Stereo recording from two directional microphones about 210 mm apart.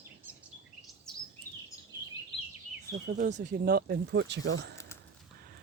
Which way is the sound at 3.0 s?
40° right (ahead or behind).